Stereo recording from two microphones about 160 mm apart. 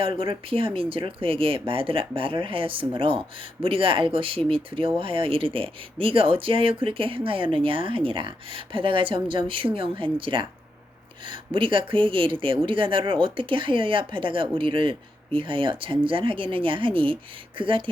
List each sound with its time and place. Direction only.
0.0 s speech: 35° right (ahead or behind)